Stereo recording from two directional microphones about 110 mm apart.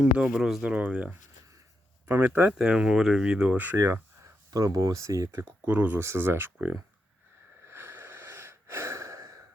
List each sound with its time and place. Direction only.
0.0 s speech: 10° right (ahead or behind)
3.8 s speech: 25° right (ahead or behind)
7.6 s wheeze: 25° right (ahead or behind)